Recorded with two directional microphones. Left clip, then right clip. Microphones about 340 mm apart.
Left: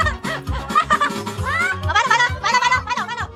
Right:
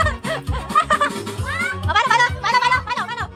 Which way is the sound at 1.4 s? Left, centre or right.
Centre.